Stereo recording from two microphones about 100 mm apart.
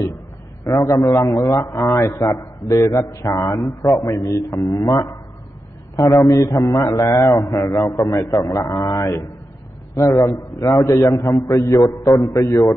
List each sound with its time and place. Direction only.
0.8 s a man's voice: 30° left (ahead or behind)